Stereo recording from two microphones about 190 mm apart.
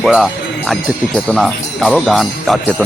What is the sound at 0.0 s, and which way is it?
Speech, centre (ahead or behind).